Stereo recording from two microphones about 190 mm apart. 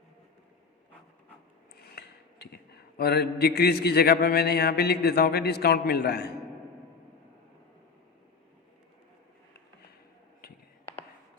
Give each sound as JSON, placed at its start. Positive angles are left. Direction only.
{"t": 1.7, "sound": "mantra", "side_deg": 55}